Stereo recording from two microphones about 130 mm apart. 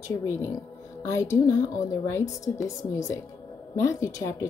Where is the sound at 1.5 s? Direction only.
20° left (ahead or behind).